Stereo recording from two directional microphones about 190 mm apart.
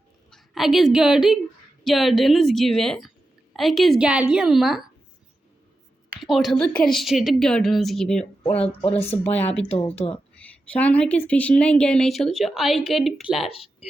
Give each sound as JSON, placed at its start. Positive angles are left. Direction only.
{"t": 0.3, "sound": "a woman's voice", "side_deg": 0}
{"t": 6.1, "sound": "speech", "side_deg": 0}
{"t": 8.6, "sound": "speech", "side_deg": 30}
{"t": 9.2, "sound": "speech", "side_deg": 10}
{"t": 13.5, "sound": "speech", "side_deg": 30}